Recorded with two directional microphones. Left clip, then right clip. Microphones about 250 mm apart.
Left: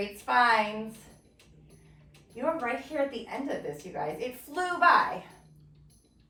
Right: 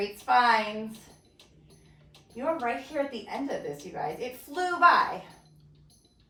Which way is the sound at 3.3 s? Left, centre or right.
Centre.